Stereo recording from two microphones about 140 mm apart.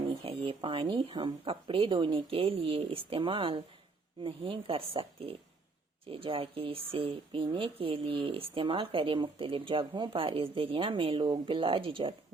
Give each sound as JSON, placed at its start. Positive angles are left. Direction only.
{"t": 0.3, "sound": "speech", "side_deg": -35}